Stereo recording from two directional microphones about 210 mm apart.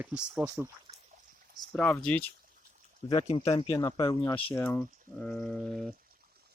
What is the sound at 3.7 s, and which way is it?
Speech, 15° left (ahead or behind).